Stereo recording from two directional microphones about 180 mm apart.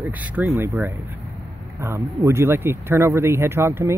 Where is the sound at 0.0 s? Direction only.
10° right (ahead or behind).